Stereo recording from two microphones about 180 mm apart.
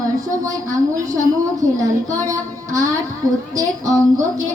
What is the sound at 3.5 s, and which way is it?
Speech, 20° right (ahead or behind).